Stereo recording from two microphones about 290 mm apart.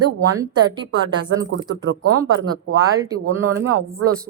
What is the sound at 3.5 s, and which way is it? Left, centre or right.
Speech, right.